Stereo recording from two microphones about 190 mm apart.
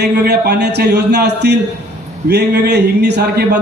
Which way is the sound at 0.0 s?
60° right (ahead or behind).